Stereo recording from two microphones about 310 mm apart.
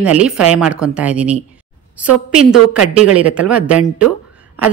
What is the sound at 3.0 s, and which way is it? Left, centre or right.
Speech, right.